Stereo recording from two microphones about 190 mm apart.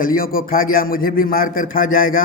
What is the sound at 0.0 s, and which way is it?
A man's voice, 45° left (ahead or behind).